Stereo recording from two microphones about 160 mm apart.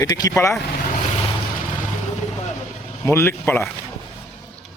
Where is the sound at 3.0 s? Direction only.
15° left (ahead or behind).